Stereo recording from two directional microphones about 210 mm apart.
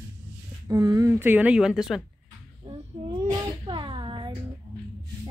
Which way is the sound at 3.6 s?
25° right (ahead or behind).